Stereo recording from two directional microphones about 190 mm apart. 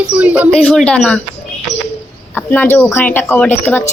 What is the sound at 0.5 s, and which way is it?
Speech, 5° left (ahead or behind).